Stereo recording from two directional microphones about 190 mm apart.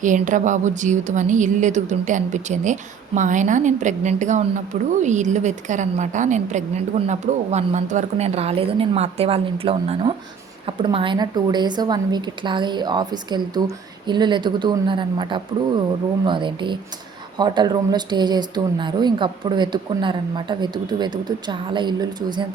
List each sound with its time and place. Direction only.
0.0 s a woman's voice: 40° right (ahead or behind); by 22.4 s 25° right (ahead or behind)